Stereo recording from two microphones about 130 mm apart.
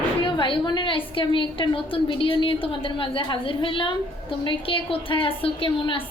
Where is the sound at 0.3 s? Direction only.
40° left (ahead or behind).